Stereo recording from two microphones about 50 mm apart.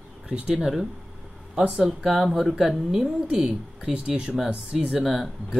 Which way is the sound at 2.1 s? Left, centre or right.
Centre.